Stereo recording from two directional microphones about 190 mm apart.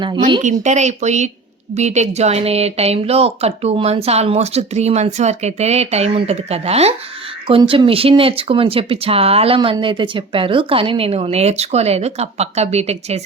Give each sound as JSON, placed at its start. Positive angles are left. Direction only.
{"t": 0.6, "sound": "a woman's voice", "side_deg": -40}